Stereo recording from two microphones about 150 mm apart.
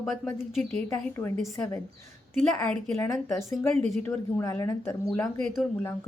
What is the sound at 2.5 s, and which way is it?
Speech, 10° left (ahead or behind).